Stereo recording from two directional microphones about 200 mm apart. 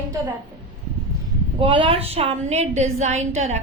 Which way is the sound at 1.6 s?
25° right (ahead or behind).